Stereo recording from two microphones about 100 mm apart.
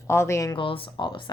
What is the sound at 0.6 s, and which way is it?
Speech, 60° left (ahead or behind).